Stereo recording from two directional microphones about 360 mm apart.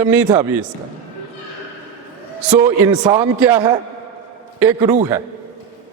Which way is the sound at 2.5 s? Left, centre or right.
Centre.